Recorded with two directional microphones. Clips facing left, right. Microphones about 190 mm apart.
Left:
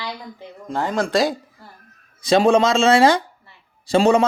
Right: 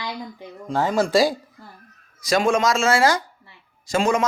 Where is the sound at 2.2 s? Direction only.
30° left (ahead or behind).